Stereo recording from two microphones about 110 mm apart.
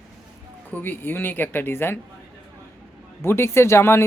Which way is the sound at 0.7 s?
15° left (ahead or behind).